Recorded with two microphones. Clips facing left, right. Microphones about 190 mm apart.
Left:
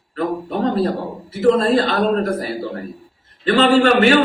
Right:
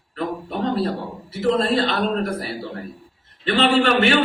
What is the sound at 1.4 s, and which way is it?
Speech, 45° left (ahead or behind).